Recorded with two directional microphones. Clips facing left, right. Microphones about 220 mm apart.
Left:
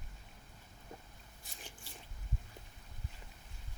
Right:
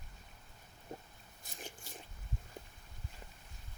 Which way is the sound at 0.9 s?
35° right (ahead or behind).